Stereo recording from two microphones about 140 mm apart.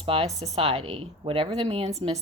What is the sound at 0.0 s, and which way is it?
Speech, 45° right (ahead or behind).